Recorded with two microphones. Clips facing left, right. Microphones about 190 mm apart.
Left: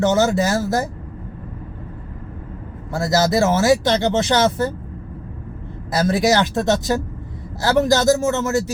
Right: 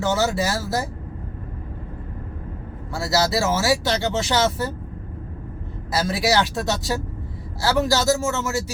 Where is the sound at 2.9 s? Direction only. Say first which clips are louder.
Left 4 dB; 20° left (ahead or behind).